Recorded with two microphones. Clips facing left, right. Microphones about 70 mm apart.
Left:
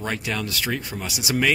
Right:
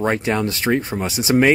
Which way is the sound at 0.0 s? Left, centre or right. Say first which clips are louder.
Right 8 dB; right.